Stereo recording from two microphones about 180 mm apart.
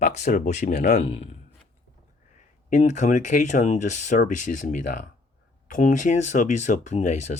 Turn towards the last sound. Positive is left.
turn(degrees=40)  # may be behind; listen again after turning